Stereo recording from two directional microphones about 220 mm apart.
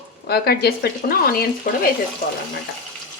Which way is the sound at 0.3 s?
45° left (ahead or behind).